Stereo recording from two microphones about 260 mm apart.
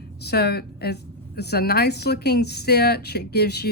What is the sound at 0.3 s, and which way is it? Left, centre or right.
A woman's voice, left.